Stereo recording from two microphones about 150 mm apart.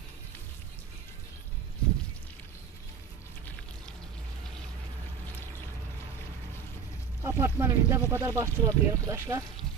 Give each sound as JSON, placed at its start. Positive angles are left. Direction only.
{"t": 7.2, "sound": "speech", "side_deg": -20}